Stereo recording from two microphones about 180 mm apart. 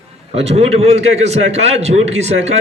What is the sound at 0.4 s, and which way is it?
A man's voice, 35° right (ahead or behind).